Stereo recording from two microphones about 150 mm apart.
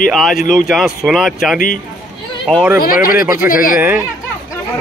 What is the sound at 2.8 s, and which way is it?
Speech, 70° left (ahead or behind).